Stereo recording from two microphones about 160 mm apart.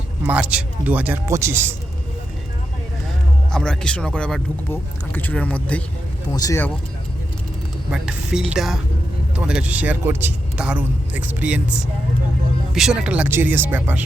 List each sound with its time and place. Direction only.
0.3 s a man's voice: 10° right (ahead or behind)
3.5 s speech: 5° left (ahead or behind)
6.3 s speech: 20° left (ahead or behind)
7.9 s a woman's voice: 5° right (ahead or behind)
12.7 s a man's voice: 5° right (ahead or behind)